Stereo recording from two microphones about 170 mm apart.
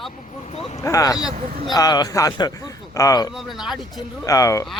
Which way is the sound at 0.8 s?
20° left (ahead or behind).